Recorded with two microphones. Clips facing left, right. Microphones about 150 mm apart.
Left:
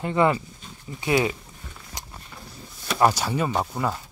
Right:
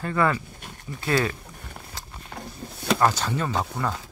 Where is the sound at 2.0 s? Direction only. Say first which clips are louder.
Left 1 dB; 15° left (ahead or behind).